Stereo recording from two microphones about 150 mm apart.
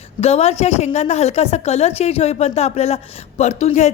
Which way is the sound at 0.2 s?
45° left (ahead or behind).